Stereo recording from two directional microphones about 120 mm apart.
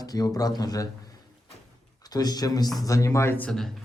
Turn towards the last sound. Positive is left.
turn(degrees=5)  # may be behind; listen again after turning